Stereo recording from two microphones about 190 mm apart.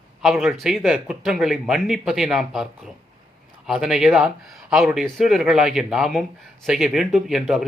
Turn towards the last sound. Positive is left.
turn(degrees=0)  # may be behind; listen again after turning